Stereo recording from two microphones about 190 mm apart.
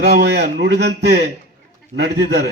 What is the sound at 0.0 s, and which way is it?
A man's voice, 60° right (ahead or behind).